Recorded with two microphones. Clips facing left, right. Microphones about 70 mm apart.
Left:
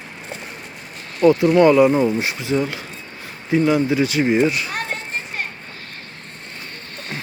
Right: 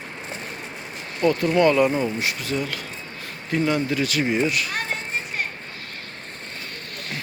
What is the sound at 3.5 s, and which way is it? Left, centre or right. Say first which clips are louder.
Speech: left 6 dB; centre.